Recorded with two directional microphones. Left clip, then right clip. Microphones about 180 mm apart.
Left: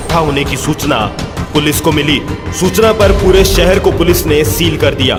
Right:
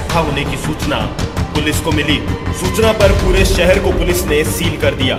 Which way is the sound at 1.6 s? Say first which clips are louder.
Left 3 dB; 55° left (ahead or behind).